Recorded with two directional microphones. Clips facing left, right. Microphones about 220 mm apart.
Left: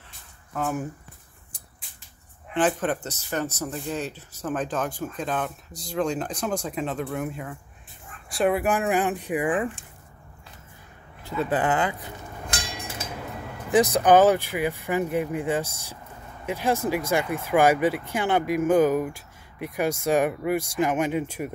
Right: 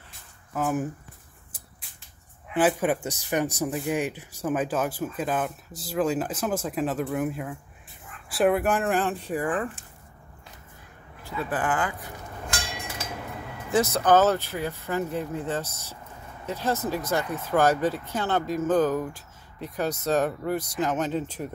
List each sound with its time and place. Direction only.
0.5 s speech: 5° right (ahead or behind)
2.5 s speech: 10° right (ahead or behind)
8.6 s speech: 10° left (ahead or behind)
11.2 s speech: 20° left (ahead or behind)
13.7 s speech: 15° left (ahead or behind)